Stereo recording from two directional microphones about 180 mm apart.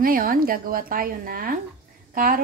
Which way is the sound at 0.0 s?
55° right (ahead or behind).